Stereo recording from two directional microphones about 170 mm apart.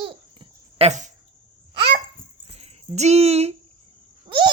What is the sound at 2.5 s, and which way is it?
Speech, 40° right (ahead or behind).